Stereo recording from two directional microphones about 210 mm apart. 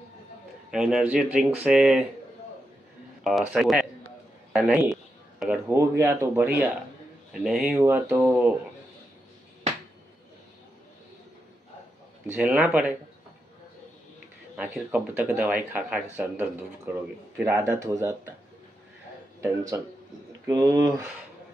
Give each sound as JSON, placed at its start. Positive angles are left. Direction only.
{"t": 0.7, "sound": "speech", "side_deg": 0}
{"t": 3.3, "sound": "a man's voice", "side_deg": 0}
{"t": 12.3, "sound": "a man's voice", "side_deg": -5}
{"t": 14.6, "sound": "a man's voice", "side_deg": -5}
{"t": 19.4, "sound": "a man's voice", "side_deg": -15}